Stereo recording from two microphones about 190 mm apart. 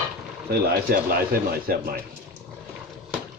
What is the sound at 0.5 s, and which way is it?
Speech, 55° right (ahead or behind).